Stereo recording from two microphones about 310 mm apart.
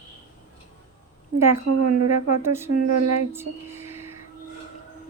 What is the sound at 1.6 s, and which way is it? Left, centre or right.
Speech, right.